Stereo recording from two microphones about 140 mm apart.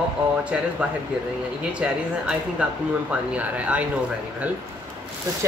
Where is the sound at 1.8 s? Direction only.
10° right (ahead or behind).